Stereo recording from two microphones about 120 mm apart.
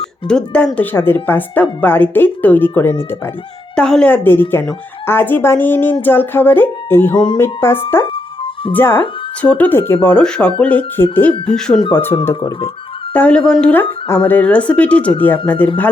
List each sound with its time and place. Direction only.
0.3 s speech: 5° left (ahead or behind)
3.8 s speech: 5° left (ahead or behind)
11.5 s speech: 5° left (ahead or behind)
11.8 s speech: 45° left (ahead or behind)
12.2 s speech: 25° left (ahead or behind)
13.1 s speech: 10° left (ahead or behind)